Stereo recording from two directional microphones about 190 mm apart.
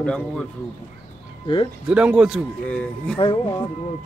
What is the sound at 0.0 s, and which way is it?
Speech, 5° left (ahead or behind).